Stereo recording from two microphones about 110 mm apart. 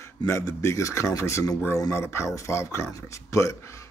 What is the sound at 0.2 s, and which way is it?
Speech, 30° left (ahead or behind).